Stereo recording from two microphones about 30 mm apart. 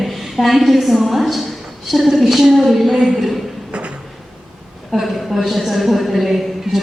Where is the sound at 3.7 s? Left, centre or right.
Right.